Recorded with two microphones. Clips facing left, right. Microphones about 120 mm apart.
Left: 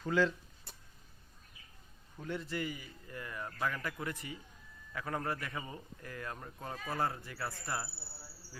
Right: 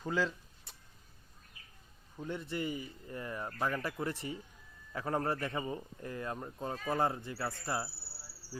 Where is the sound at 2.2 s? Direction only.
20° right (ahead or behind).